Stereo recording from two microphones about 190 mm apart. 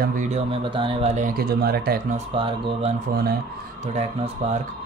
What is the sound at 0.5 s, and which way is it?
Speech, 25° right (ahead or behind).